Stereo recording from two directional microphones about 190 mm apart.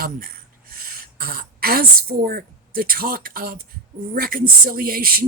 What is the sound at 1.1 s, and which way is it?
Speech, 55° right (ahead or behind).